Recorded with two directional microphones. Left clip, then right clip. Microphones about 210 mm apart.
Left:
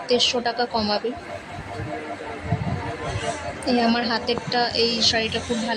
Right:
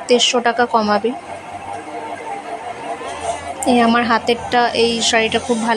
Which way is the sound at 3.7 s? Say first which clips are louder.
Right 8 dB; 15° right (ahead or behind).